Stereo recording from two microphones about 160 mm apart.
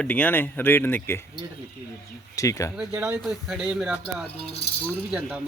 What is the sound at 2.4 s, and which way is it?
Speech, 20° left (ahead or behind).